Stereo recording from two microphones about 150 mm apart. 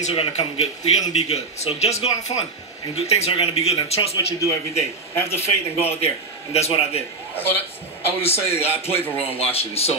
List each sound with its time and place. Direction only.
0.0 s a man's voice: 45° left (ahead or behind)
4.4 s a man's voice: 20° left (ahead or behind)
5.3 s a man's voice: 45° left (ahead or behind)
7.3 s a man's voice: 15° left (ahead or behind)
8.5 s speech: 40° left (ahead or behind)
8.9 s a man's voice: 15° left (ahead or behind)
9.2 s speech: 40° left (ahead or behind)